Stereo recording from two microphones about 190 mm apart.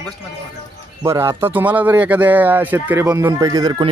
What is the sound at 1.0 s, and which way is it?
Speech, 15° right (ahead or behind).